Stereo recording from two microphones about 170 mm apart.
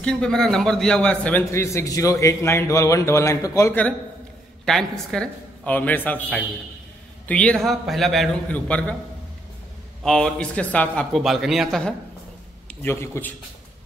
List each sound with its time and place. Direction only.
0.0 s a man's voice: 5° left (ahead or behind)
10.0 s a man's voice: 5° left (ahead or behind)
12.6 s a man's voice: 15° left (ahead or behind)